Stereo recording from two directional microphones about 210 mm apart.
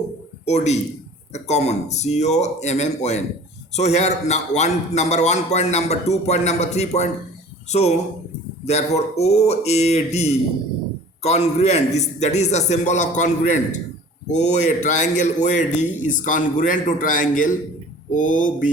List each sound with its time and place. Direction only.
0.4 s a man's voice: 30° left (ahead or behind)